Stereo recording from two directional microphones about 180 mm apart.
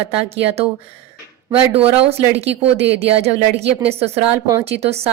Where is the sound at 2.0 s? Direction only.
35° right (ahead or behind).